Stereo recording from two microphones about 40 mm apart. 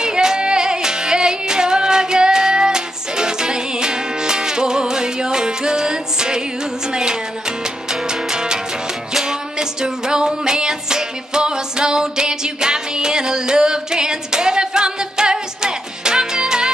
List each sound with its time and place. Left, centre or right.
0.0 s music: centre